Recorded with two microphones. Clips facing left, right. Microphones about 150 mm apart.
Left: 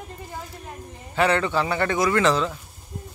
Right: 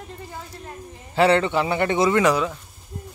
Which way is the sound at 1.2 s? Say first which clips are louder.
Right 3 dB; 25° right (ahead or behind).